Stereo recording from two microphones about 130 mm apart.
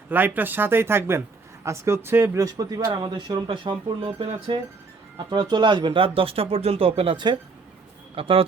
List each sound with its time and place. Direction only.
0.3 s speech: 15° right (ahead or behind); by 8.4 s 45° right (ahead or behind)